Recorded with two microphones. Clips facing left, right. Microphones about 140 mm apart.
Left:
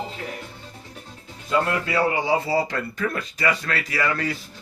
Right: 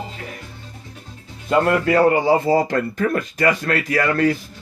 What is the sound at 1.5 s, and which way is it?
A man's voice, 55° right (ahead or behind).